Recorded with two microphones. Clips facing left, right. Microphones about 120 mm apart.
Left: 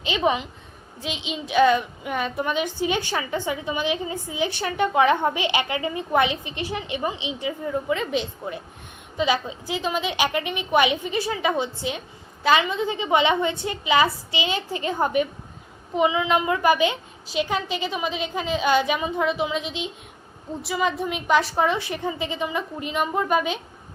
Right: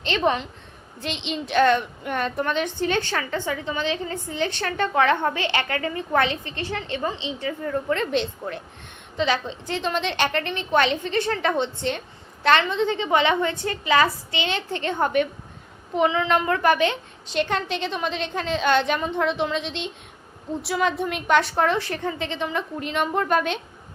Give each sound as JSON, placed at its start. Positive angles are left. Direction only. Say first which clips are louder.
{"t": 0.0, "sound": "a woman's voice", "louder": "even", "side_deg": 5}
{"t": 13.1, "sound": "a woman's voice", "louder": "left 1 dB", "side_deg": 20}
{"t": 14.3, "sound": "a woman's voice", "louder": "even", "side_deg": 5}